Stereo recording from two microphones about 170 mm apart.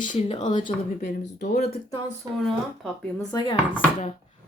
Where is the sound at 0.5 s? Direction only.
50° left (ahead or behind).